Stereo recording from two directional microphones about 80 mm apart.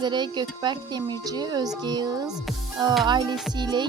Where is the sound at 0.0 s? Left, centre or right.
Right.